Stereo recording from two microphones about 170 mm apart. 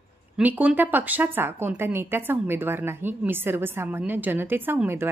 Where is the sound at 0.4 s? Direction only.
10° right (ahead or behind).